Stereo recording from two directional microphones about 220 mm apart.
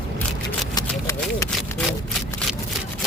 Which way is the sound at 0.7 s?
15° left (ahead or behind).